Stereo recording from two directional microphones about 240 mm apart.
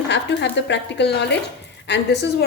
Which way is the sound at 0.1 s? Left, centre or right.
Left.